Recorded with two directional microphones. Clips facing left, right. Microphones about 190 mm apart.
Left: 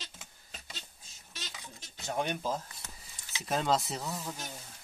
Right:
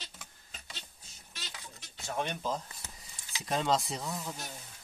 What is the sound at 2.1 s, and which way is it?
Speech, 10° left (ahead or behind).